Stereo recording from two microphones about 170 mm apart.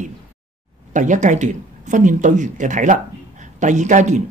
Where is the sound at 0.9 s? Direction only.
45° right (ahead or behind).